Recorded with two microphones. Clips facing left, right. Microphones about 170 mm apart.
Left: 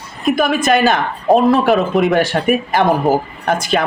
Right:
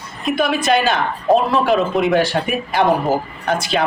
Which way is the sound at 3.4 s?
45° left (ahead or behind).